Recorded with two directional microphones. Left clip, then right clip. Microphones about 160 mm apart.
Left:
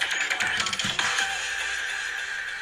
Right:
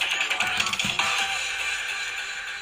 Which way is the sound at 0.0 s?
Centre (ahead or behind).